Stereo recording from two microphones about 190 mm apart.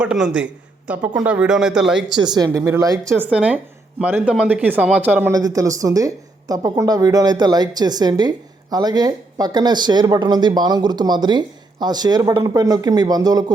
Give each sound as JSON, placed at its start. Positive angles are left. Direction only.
{"t": 0.0, "sound": "a man's voice", "side_deg": -5}
{"t": 2.1, "sound": "speech", "side_deg": -20}
{"t": 3.2, "sound": "speech", "side_deg": -5}
{"t": 5.3, "sound": "speech", "side_deg": -20}